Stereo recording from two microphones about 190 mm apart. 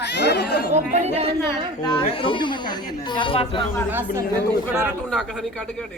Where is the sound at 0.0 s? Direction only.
65° left (ahead or behind).